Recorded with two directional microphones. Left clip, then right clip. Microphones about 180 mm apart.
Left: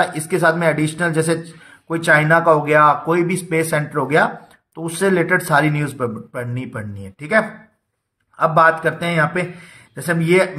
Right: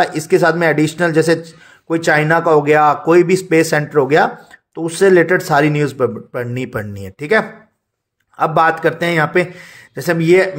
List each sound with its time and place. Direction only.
0.0 s speech: 30° right (ahead or behind)